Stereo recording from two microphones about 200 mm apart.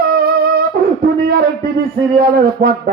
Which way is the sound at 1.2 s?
50° right (ahead or behind).